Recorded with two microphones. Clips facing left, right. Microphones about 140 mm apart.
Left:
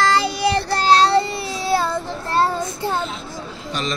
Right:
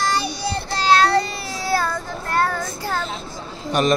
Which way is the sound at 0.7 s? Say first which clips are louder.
Even; 40° left (ahead or behind).